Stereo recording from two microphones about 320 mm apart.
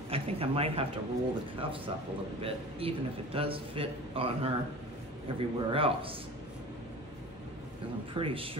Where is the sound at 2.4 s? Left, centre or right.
Centre.